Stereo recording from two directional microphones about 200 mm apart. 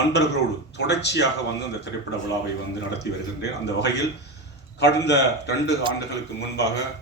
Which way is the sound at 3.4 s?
60° left (ahead or behind).